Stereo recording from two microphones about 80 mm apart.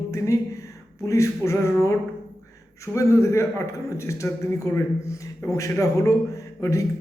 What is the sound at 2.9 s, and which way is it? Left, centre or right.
A man's voice, left.